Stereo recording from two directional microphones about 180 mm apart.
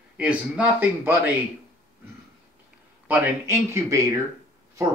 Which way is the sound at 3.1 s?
10° right (ahead or behind).